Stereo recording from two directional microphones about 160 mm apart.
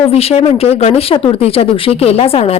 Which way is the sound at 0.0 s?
40° left (ahead or behind).